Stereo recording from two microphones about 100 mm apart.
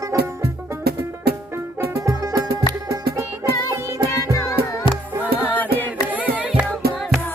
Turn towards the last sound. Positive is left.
turn(degrees=0)  # may be behind; listen again after turning